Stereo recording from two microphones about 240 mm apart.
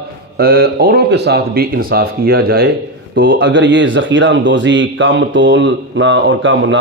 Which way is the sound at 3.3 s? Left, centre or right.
Right.